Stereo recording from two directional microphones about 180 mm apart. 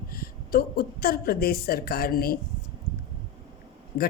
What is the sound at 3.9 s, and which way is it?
Speech, 60° left (ahead or behind).